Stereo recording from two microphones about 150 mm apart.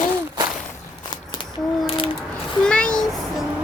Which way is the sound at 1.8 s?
35° left (ahead or behind).